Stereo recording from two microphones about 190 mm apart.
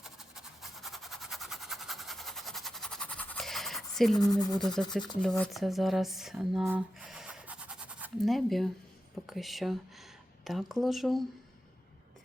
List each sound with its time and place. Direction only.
0.0 s a sound: centre (ahead or behind)
4.2 s speech: 20° left (ahead or behind)
5.4 s speech: centre (ahead or behind)